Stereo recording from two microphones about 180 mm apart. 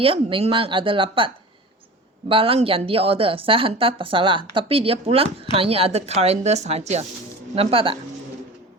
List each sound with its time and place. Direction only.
0.0 s speech: 30° right (ahead or behind)
2.3 s speech: 30° right (ahead or behind)